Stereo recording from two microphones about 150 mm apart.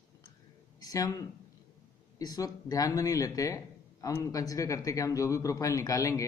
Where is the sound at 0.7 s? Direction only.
25° left (ahead or behind).